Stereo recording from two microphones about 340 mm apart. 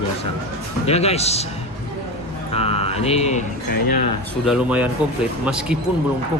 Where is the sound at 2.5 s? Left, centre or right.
Centre.